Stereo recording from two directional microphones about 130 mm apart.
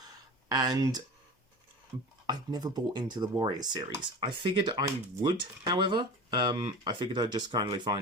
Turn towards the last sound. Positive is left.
turn(degrees=-30)  # may be behind; listen again after turning